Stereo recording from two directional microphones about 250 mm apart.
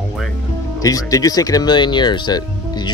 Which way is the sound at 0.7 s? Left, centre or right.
Centre.